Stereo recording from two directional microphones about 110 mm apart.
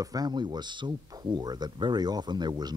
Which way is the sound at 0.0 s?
35° right (ahead or behind).